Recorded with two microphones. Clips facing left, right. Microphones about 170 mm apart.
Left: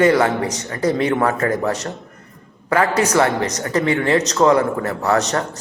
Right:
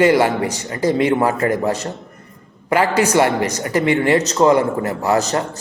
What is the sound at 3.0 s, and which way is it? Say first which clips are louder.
Speech: right 1 dB; 30° right (ahead or behind).